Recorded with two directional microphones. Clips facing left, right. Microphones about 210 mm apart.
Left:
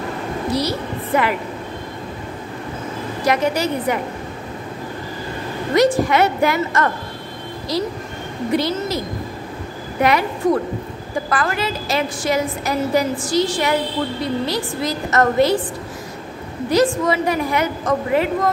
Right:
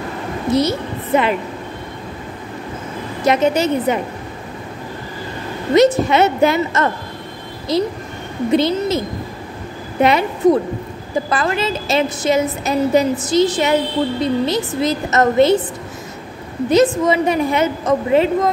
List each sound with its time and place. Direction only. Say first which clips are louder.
0.5 s a woman's voice: right 6 dB; 20° right (ahead or behind)
3.3 s a woman's voice: right 4 dB; 25° right (ahead or behind)
5.8 s a woman's voice: right 3 dB; 25° right (ahead or behind)
10.0 s a woman's voice: right 4 dB; 25° right (ahead or behind)
16.6 s a woman's voice: right 3 dB; 20° right (ahead or behind)